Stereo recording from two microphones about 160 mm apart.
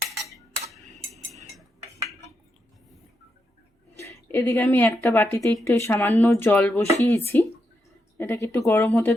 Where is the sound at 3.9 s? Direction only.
15° left (ahead or behind).